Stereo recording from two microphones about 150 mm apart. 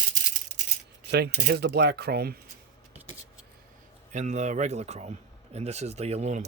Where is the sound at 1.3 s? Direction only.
85° right.